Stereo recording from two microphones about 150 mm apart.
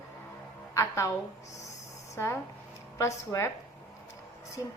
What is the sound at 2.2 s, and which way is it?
A woman's voice, 15° left (ahead or behind).